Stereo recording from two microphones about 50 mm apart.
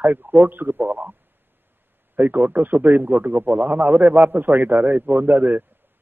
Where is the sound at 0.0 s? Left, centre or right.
Right.